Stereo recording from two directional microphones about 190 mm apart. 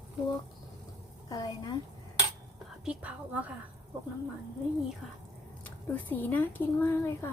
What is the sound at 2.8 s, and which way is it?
Speech, 5° right (ahead or behind).